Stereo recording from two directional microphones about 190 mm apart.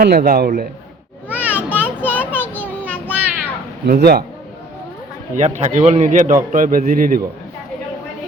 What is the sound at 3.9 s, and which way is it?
Speech, 55° right (ahead or behind).